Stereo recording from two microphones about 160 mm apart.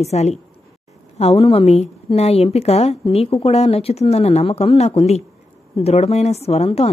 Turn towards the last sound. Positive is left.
turn(degrees=40)  # may be behind; listen again after turning